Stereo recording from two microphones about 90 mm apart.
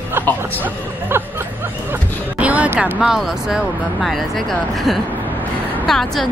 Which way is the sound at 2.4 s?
15° right (ahead or behind).